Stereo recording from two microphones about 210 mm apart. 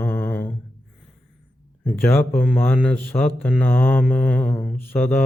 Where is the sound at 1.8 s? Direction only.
10° left (ahead or behind).